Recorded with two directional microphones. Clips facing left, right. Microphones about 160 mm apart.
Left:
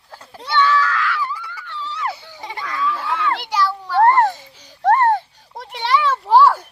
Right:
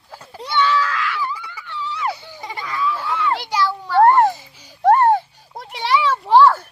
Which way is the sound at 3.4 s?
5° right (ahead or behind).